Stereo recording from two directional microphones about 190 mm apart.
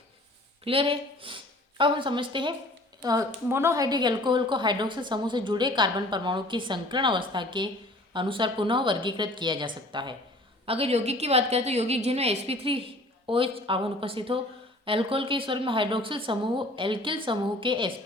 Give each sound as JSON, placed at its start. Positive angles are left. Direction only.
{"t": 0.6, "sound": "a woman's voice", "side_deg": -30}